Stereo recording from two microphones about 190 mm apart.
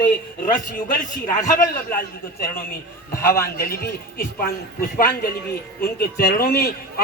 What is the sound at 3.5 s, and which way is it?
A man's voice, 50° left (ahead or behind).